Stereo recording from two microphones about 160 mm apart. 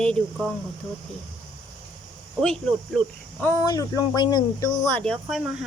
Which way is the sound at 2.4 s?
5° left (ahead or behind).